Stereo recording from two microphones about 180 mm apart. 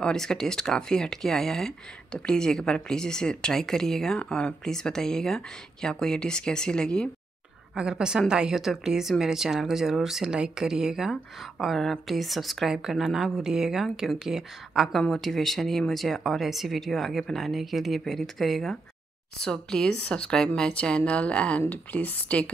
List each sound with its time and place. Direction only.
0.0 s a woman's voice: 5° left (ahead or behind)